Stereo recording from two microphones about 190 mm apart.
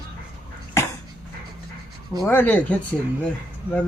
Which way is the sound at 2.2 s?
10° left (ahead or behind).